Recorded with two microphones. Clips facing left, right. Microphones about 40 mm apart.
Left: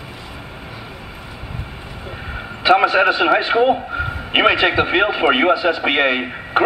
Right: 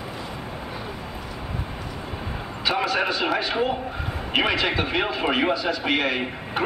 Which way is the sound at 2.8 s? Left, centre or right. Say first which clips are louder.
Left 9 dB; left.